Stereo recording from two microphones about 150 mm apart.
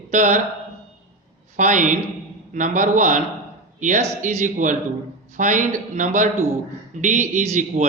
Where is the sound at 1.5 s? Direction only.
55° right (ahead or behind).